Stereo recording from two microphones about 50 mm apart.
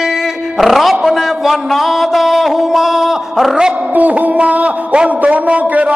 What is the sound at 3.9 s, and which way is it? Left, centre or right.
A man's voice, right.